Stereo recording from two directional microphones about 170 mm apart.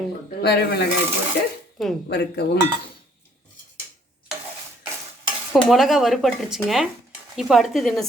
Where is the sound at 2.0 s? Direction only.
75° left (ahead or behind).